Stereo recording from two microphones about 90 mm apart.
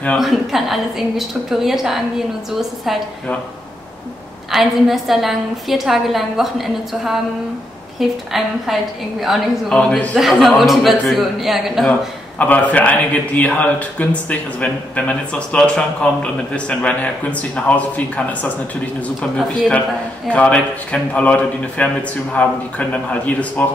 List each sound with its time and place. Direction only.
0.2 s a woman's voice: centre (ahead or behind)
4.5 s a woman's voice: centre (ahead or behind)
8.3 s a woman's voice: centre (ahead or behind)
10.1 s a woman's voice: centre (ahead or behind)
12.4 s a man's voice: 15° left (ahead or behind)
20.2 s a man's voice: 15° left (ahead or behind)